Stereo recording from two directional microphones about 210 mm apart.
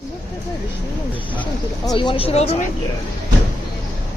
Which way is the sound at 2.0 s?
25° left (ahead or behind).